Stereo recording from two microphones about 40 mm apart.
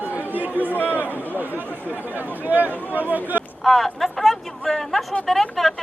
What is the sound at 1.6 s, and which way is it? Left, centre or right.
Speech, left.